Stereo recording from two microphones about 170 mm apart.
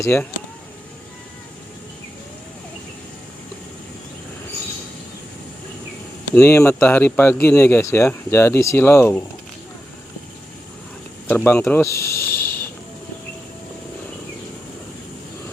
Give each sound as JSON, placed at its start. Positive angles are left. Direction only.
{"t": 0.0, "sound": "speech", "side_deg": 15}
{"t": 6.3, "sound": "speech", "side_deg": 15}
{"t": 11.3, "sound": "speech", "side_deg": 10}